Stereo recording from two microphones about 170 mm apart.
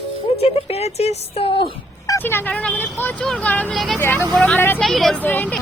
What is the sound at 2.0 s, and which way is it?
Speech, 15° left (ahead or behind).